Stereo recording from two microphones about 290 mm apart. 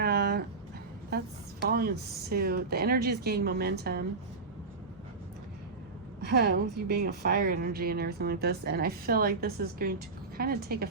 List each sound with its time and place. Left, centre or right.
0.0 s a sound: right
1.6 s a woman's voice: right
6.2 s a woman's voice: right